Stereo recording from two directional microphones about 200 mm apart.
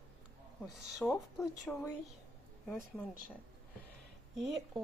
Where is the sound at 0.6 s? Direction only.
Centre (ahead or behind).